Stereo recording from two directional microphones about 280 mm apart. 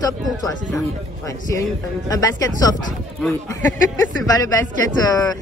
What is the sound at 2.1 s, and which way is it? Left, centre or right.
Speech, centre.